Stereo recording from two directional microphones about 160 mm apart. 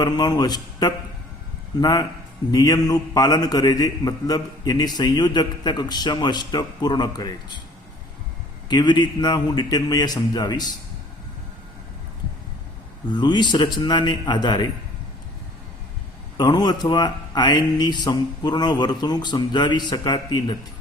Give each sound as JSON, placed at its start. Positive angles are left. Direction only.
{"t": 0.0, "sound": "a man's voice", "side_deg": 25}
{"t": 8.7, "sound": "a man's voice", "side_deg": 25}
{"t": 13.1, "sound": "a man's voice", "side_deg": 30}
{"t": 16.4, "sound": "a man's voice", "side_deg": 25}